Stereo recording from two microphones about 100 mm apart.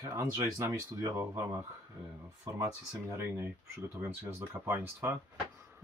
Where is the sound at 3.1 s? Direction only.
25° right (ahead or behind).